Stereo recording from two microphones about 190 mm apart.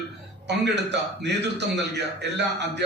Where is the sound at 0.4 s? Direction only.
65° right (ahead or behind).